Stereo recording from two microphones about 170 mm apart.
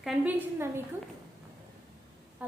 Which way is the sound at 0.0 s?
10° right (ahead or behind).